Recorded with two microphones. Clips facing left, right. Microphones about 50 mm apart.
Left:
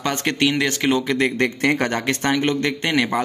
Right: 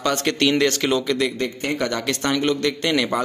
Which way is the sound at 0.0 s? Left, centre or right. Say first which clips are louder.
Even; left.